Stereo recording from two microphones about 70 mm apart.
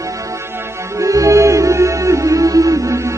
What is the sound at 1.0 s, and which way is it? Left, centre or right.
Music, right.